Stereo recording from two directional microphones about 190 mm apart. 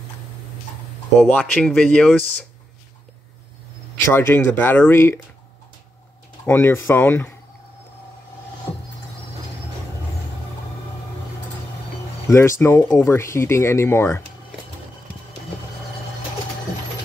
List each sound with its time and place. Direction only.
1.5 s speech: 5° left (ahead or behind)
4.1 s speech: 10° left (ahead or behind)
6.4 s speech: 10° left (ahead or behind)
12.3 s speech: 15° left (ahead or behind)